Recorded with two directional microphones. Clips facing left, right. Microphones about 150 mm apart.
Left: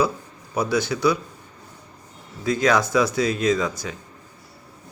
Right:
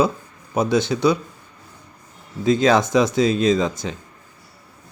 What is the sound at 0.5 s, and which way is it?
Speech, 25° right (ahead or behind).